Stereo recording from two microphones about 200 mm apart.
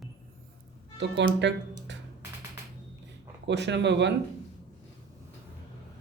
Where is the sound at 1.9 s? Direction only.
60° right (ahead or behind).